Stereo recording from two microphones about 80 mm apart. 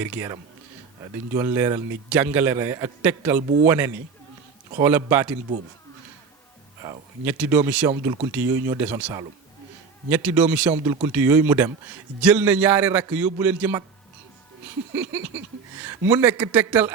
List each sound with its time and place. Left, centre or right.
0.0 s a man's voice: right
1.4 s speech: right
2.0 s a man's voice: right
7.3 s a man's voice: right
14.9 s a man's voice: right